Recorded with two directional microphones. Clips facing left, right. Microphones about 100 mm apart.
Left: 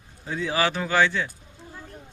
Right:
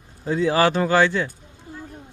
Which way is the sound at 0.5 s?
40° right (ahead or behind).